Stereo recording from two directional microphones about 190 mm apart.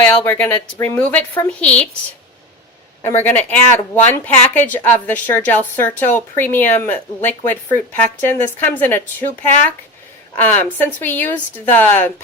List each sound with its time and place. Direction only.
0.0 s a woman's voice: 5° left (ahead or behind)
3.0 s a woman's voice: 10° left (ahead or behind)
10.3 s a woman's voice: 10° left (ahead or behind)